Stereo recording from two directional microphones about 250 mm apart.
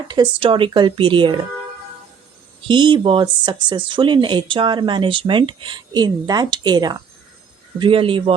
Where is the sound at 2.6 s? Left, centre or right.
Centre.